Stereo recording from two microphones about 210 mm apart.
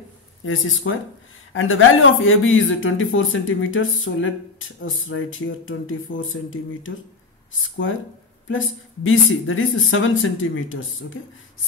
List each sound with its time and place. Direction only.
0.5 s speech: 70° left (ahead or behind)
8.5 s speech: 70° left (ahead or behind)